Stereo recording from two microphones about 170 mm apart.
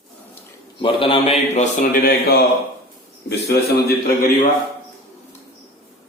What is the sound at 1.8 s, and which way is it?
A man's voice, 60° left (ahead or behind).